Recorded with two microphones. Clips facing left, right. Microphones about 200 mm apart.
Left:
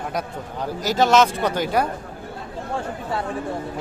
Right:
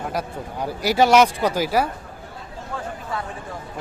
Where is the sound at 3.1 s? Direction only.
30° left (ahead or behind).